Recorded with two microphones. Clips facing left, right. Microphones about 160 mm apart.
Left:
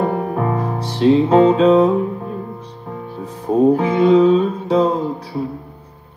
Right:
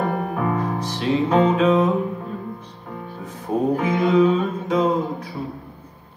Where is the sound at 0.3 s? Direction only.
30° left (ahead or behind).